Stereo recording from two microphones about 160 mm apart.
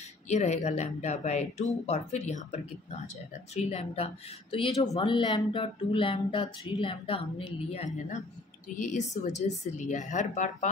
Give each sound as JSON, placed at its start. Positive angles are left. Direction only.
{"t": 0.3, "sound": "speech", "side_deg": 45}